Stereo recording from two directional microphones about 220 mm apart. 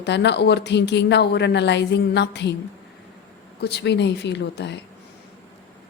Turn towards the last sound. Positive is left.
turn(degrees=50)  # may be behind; listen again after turning